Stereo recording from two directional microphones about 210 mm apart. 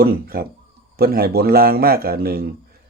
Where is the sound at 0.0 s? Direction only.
45° right (ahead or behind).